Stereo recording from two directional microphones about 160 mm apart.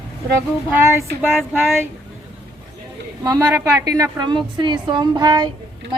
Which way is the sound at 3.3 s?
20° right (ahead or behind).